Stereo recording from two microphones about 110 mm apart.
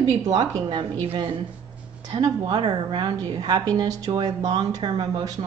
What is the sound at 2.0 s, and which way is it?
A woman's voice, 35° right (ahead or behind).